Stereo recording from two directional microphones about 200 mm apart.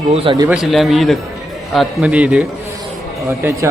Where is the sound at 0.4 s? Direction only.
5° right (ahead or behind).